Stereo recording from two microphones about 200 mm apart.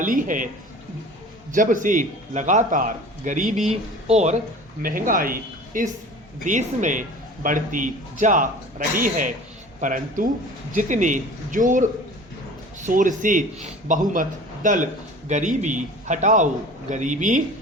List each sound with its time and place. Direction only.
0.0 s a man's voice: 40° right (ahead or behind)
1.5 s a man's voice: 40° right (ahead or behind)
4.8 s a man's voice: 45° right (ahead or behind)